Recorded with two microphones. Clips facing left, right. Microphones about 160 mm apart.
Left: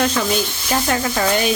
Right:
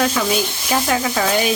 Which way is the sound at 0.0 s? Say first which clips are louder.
Even; 5° right (ahead or behind).